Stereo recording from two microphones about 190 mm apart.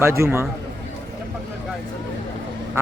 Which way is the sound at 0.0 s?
15° right (ahead or behind).